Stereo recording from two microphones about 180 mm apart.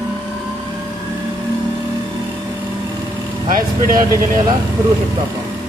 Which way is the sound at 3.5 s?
50° right (ahead or behind).